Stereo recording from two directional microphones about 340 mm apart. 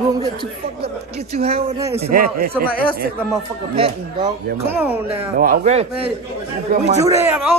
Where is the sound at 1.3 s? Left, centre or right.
Centre.